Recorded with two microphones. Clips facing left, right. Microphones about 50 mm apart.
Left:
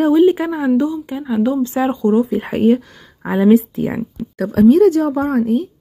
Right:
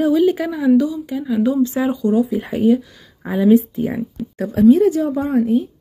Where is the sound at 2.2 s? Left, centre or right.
Left.